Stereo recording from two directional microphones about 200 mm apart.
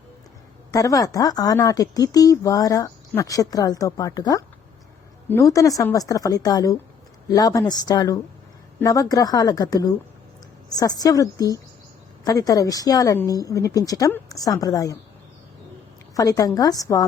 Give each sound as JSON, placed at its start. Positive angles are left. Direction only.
{"t": 0.7, "sound": "a woman's voice", "side_deg": 15}
{"t": 16.1, "sound": "speech", "side_deg": 15}